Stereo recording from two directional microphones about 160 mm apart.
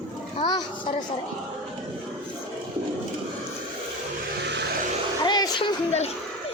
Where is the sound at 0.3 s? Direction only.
30° left (ahead or behind).